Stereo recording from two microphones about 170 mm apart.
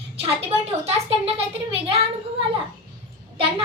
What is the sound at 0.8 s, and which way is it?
Speech, 35° right (ahead or behind).